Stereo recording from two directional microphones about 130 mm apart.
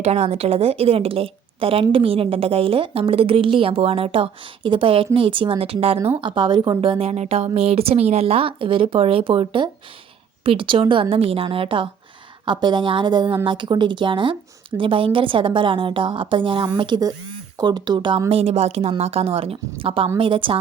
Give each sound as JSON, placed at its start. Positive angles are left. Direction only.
{"t": 0.0, "sound": "a woman's voice", "side_deg": -55}
{"t": 6.2, "sound": "a woman's voice", "side_deg": -35}
{"t": 18.3, "sound": "a woman's voice", "side_deg": -50}